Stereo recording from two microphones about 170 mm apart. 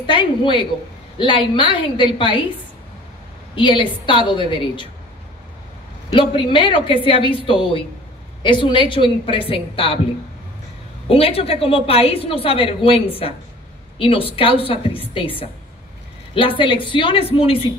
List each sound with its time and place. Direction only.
0.0 s a woman's voice: 30° left (ahead or behind)
3.5 s a woman's voice: 30° left (ahead or behind)
6.1 s a woman's voice: 30° left (ahead or behind)
11.1 s a woman's voice: 35° left (ahead or behind)